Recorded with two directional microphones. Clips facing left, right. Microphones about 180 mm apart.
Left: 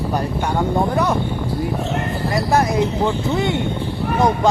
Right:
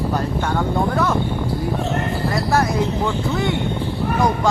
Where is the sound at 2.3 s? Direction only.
20° left (ahead or behind).